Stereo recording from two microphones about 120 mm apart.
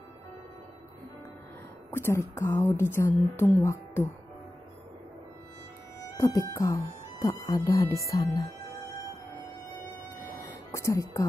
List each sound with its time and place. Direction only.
1.9 s a woman's voice: 20° left (ahead or behind)
5.9 s music: 25° left (ahead or behind)
6.5 s speech: 25° left (ahead or behind)
10.4 s music: 25° left (ahead or behind)